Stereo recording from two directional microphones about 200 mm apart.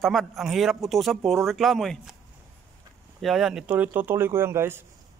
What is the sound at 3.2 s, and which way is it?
Speech, centre (ahead or behind).